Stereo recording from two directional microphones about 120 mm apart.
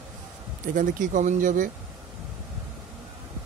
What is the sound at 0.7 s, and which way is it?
Speech, 90° right.